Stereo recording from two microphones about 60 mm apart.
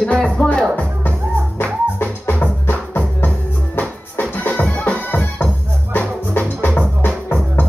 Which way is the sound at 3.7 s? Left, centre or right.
Left.